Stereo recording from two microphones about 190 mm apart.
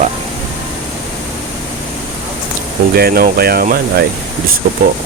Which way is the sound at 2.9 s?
55° right (ahead or behind).